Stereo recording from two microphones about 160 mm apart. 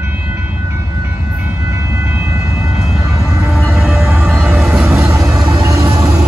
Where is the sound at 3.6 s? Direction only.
15° left (ahead or behind).